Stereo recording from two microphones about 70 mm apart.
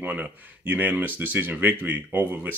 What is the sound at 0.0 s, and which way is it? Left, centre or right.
Speech, right.